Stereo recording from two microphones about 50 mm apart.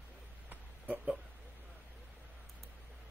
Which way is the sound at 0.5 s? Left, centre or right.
Right.